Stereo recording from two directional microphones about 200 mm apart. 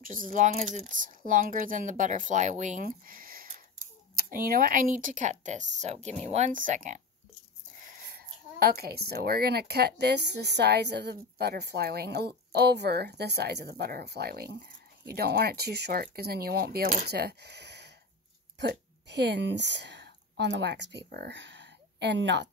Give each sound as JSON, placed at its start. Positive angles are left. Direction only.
{"t": 0.0, "sound": "a woman's voice", "side_deg": -45}